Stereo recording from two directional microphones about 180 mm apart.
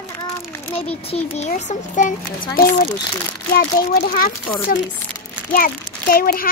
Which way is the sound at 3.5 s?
55° left (ahead or behind).